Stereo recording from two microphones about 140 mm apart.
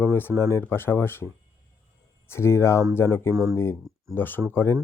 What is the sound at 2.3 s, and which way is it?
Speech, 20° left (ahead or behind).